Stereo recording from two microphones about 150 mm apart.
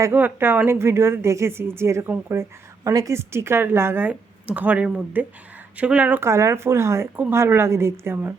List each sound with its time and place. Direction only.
0.0 s a woman's voice: 15° right (ahead or behind)